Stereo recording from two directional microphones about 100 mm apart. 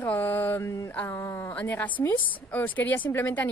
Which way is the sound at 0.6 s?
30° left (ahead or behind).